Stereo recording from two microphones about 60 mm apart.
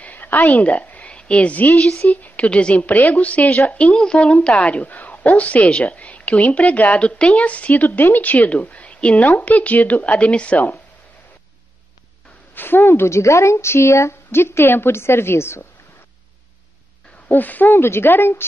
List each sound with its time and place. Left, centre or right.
0.0 s a woman's voice: left
4.8 s a woman's voice: left
12.5 s speech: left
17.3 s speech: left